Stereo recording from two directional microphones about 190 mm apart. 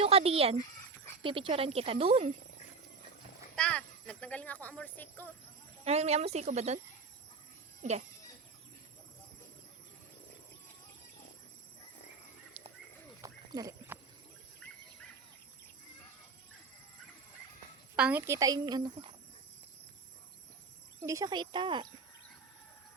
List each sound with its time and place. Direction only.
0.0 s speech: 30° right (ahead or behind)
3.5 s speech: 5° left (ahead or behind)
5.8 s speech: 35° right (ahead or behind)
12.6 s a sound: 35° right (ahead or behind)
13.2 s a sound: 20° right (ahead or behind)
17.9 s speech: 5° right (ahead or behind)
21.1 s speech: 20° right (ahead or behind)